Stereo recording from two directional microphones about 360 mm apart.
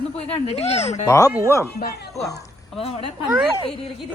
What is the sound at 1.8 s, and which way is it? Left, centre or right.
Speech, left.